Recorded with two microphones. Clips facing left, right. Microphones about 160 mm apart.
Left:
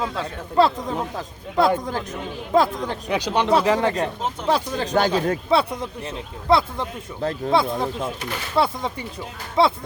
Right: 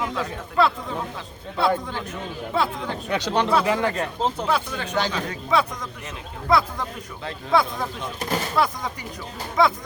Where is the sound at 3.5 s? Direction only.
30° left (ahead or behind).